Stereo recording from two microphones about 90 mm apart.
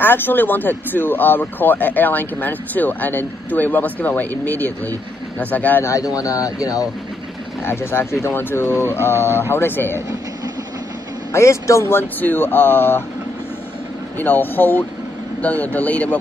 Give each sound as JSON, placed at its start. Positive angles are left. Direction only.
{"t": 0.0, "sound": "speech", "side_deg": 25}
{"t": 5.9, "sound": "speech", "side_deg": 40}
{"t": 7.6, "sound": "speech", "side_deg": 25}
{"t": 11.3, "sound": "speech", "side_deg": 30}
{"t": 14.2, "sound": "speech", "side_deg": 20}